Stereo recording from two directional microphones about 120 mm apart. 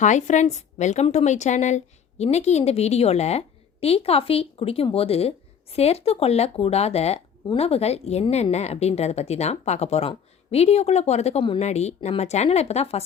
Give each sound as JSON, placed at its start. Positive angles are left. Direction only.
{"t": 0.0, "sound": "a woman's voice", "side_deg": 85}